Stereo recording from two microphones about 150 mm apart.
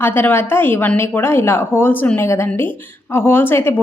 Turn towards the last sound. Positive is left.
turn(degrees=15)  # may be behind; listen again after turning